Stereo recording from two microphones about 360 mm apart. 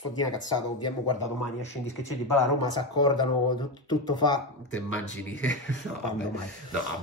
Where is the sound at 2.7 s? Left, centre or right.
Centre.